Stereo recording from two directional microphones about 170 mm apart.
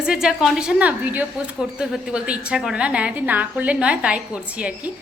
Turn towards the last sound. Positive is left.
turn(degrees=-5)  # may be behind; listen again after turning